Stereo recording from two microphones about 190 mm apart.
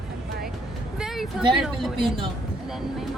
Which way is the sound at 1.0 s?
Centre (ahead or behind).